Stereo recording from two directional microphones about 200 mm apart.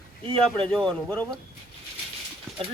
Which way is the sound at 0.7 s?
5° left (ahead or behind).